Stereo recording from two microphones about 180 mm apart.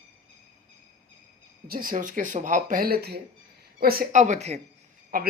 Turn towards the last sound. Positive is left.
turn(degrees=-55)  # may be behind; listen again after turning